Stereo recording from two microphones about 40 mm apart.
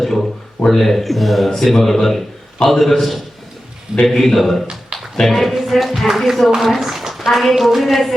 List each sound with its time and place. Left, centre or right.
0.0 s speech: centre
4.9 s a sound: centre
5.3 s a woman's voice: centre